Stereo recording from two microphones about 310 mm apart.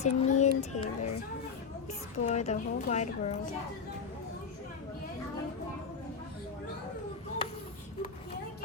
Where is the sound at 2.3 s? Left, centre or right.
Left.